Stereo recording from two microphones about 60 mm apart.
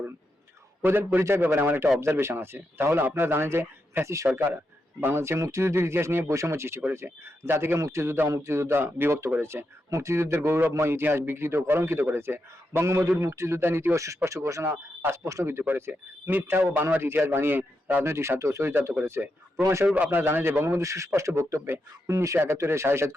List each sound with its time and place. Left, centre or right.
0.9 s a man's voice: right
4.0 s speech: right
4.4 s a man's voice: right
7.8 s a man's voice: right
13.9 s speech: right
15.6 s a man's voice: right
18.0 s a man's voice: right
18.6 s a man's voice: right
19.8 s a man's voice: right
20.1 s a man's voice: right
20.8 s speech: right
21.7 s a man's voice: right